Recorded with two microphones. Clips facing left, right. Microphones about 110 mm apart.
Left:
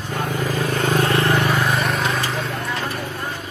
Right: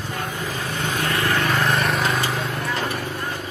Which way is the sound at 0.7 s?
45° left (ahead or behind).